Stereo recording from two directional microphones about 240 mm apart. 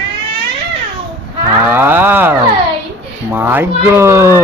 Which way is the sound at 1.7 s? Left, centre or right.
Centre.